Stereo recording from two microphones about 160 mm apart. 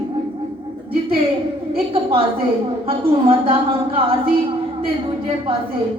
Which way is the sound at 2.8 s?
35° right (ahead or behind).